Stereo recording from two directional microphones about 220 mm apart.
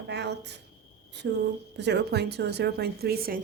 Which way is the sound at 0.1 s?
50° right (ahead or behind).